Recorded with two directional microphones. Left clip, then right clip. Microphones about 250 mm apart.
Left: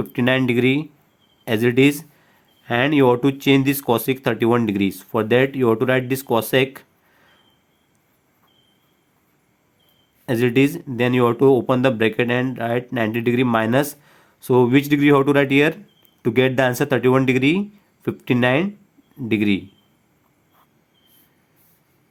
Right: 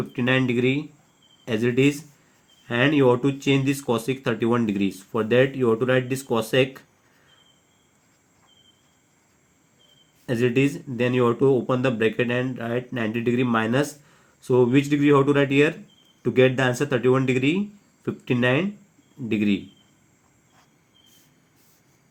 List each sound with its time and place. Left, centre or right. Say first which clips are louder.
0.1 s speech: left 4 dB; left
10.2 s speech: left 4 dB; left